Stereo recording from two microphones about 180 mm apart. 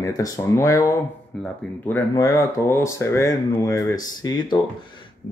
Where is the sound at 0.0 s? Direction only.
20° left (ahead or behind).